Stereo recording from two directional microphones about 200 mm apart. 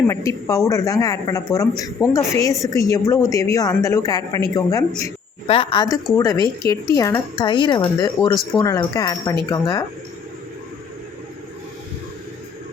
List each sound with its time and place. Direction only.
0.1 s a woman's voice: 15° left (ahead or behind)